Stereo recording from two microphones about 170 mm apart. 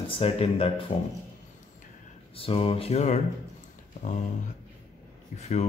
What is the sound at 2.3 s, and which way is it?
Speech, 35° left (ahead or behind).